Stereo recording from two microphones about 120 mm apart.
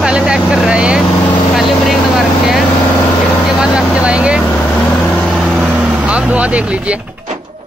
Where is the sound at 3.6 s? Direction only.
5° right (ahead or behind).